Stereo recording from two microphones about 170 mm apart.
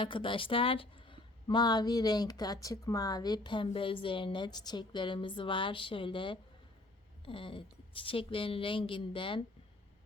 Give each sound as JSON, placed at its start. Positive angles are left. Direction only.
{"t": 0.0, "sound": "a woman's voice", "side_deg": 30}